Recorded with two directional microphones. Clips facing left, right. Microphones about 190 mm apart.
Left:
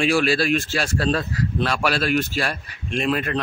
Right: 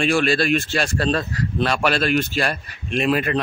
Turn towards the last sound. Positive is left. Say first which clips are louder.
# right 3 dB
turn(degrees=-5)  # may be behind; listen again after turning